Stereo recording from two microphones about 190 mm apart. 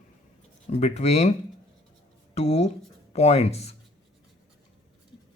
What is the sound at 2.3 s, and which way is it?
Speech, 35° left (ahead or behind).